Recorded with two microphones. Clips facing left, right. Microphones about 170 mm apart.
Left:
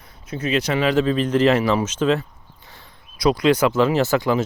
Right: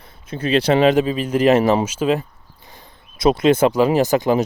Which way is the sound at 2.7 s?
25° right (ahead or behind).